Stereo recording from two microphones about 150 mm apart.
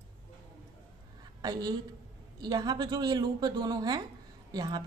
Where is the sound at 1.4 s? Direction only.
25° right (ahead or behind).